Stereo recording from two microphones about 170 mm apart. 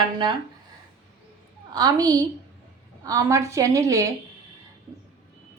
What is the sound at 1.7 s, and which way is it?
A woman's voice, 20° right (ahead or behind).